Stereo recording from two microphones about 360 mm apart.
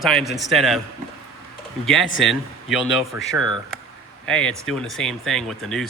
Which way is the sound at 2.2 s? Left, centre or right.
Centre.